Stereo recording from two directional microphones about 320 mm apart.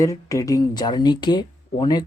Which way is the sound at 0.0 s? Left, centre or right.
Centre.